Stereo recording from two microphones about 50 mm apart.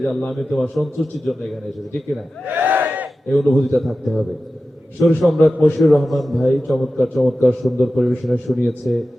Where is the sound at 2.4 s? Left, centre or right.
Right.